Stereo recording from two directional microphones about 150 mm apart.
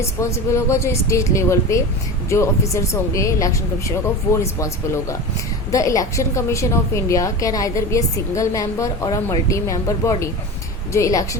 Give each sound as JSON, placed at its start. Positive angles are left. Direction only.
{"t": 0.2, "sound": "a woman's voice", "side_deg": 20}